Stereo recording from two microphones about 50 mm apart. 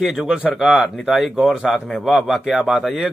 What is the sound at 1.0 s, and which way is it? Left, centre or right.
Speech, centre.